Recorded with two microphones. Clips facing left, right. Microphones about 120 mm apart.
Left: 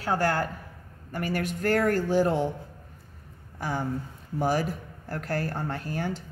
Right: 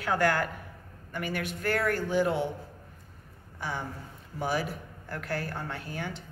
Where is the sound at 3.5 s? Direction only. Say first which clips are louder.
Left 6 dB; 45° left (ahead or behind).